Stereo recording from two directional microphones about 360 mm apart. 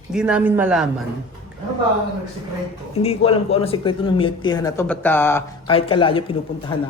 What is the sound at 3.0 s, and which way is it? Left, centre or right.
Speech, centre.